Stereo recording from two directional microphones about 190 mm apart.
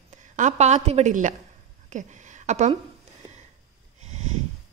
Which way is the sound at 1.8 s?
40° right (ahead or behind).